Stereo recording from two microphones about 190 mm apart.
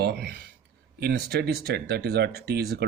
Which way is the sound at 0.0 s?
60° right (ahead or behind).